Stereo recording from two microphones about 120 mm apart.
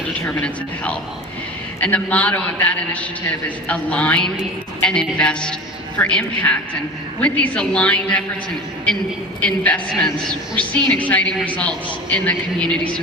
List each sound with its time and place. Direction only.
0.3 s a woman's voice: 10° left (ahead or behind)
9.4 s a woman's voice: 10° left (ahead or behind)